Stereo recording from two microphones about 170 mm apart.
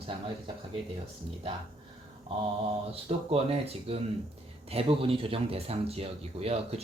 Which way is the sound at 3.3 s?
35° right (ahead or behind).